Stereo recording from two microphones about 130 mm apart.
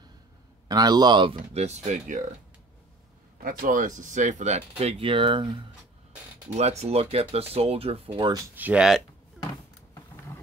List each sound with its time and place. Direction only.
0.7 s a man's voice: 30° right (ahead or behind)
1.5 s speech: 60° right (ahead or behind)
3.4 s speech: 90° right; by 5.6 s 40° right (ahead or behind)
6.5 s speech: 55° right (ahead or behind)
8.5 s speech: 10° right (ahead or behind)